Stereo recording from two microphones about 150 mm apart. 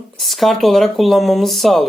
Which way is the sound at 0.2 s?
Centre (ahead or behind).